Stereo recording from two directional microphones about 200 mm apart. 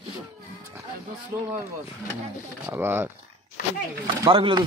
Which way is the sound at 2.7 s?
10° right (ahead or behind).